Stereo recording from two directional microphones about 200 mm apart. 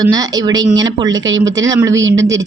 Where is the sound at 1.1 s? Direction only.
70° right (ahead or behind).